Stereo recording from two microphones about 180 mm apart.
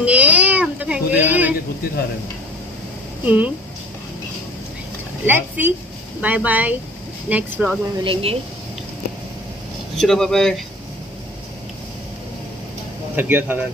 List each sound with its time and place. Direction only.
0.0 s a sound: 5° right (ahead or behind)
3.3 s speech: 10° right (ahead or behind)
5.2 s speech: 10° right (ahead or behind)
8.0 s speech: 30° right (ahead or behind)
9.9 s speech: 5° left (ahead or behind)
13.1 s speech: 10° right (ahead or behind)